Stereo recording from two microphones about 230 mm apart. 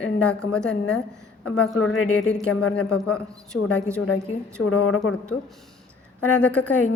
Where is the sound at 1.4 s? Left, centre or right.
Left.